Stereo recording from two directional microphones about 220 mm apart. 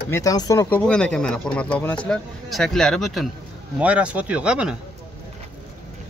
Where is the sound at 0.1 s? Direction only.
15° left (ahead or behind); by 4.7 s 5° right (ahead or behind).